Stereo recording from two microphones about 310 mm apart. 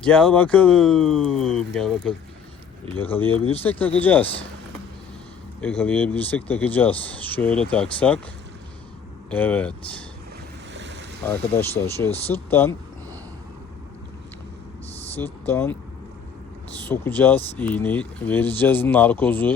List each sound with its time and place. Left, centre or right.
0.0 s speech: centre
3.2 s speech: centre
3.6 s speech: centre
5.5 s speech: centre
9.3 s speech: centre
10.8 s boat: right
11.3 s speech: centre
15.1 s speech: centre